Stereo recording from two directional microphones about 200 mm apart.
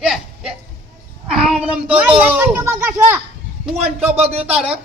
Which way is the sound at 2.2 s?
10° right (ahead or behind).